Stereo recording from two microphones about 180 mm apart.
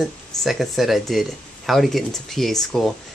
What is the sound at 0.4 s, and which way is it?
Speech, centre (ahead or behind).